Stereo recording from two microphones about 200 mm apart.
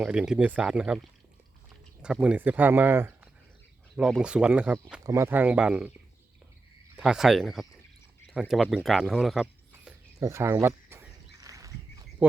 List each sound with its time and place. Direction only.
0.0 s speech: 5° right (ahead or behind)
2.2 s speech: 5° right (ahead or behind)
10.2 s speech: 15° right (ahead or behind)
11.3 s bird: 15° right (ahead or behind)